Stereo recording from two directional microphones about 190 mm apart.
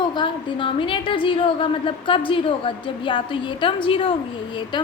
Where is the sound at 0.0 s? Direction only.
25° left (ahead or behind).